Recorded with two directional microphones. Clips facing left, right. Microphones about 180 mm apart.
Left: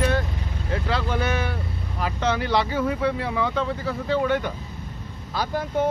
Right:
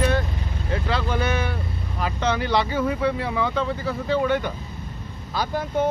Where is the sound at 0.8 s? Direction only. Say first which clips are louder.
Right 1 dB; 5° left (ahead or behind).